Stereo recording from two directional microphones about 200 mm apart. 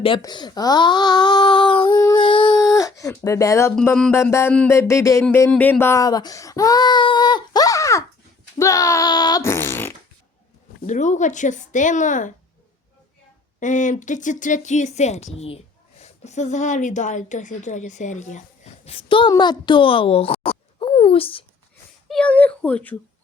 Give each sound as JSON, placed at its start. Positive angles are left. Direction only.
{"t": 0.0, "sound": "speech", "side_deg": 25}
{"t": 3.8, "sound": "speech", "side_deg": 5}
{"t": 10.8, "sound": "speech", "side_deg": 35}
{"t": 13.6, "sound": "speech", "side_deg": 40}
{"t": 22.1, "sound": "speech", "side_deg": 5}